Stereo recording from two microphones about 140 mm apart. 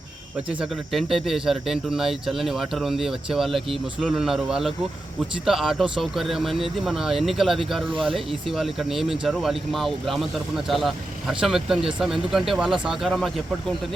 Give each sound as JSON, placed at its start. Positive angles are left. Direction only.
{"t": 0.6, "sound": "speech", "side_deg": 0}
{"t": 7.9, "sound": "speech", "side_deg": -40}
{"t": 8.1, "sound": "speech", "side_deg": 0}